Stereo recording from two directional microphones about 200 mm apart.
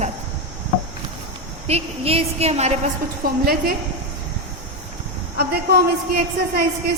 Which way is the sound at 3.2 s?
45° right (ahead or behind).